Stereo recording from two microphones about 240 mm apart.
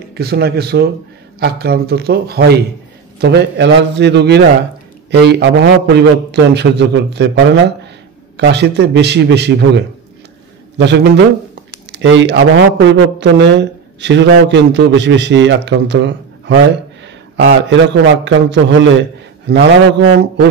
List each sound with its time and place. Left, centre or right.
0.1 s a man's voice: right
17.6 s a man's voice: right